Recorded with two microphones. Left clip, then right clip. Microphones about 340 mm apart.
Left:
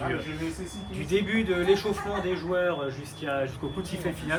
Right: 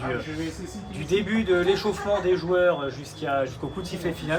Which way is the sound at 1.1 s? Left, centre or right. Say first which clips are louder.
Right 3 dB; right.